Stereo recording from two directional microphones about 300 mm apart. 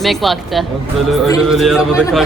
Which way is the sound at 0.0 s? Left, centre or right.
Centre.